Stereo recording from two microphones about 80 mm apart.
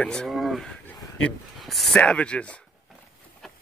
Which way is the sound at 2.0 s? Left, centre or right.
Centre.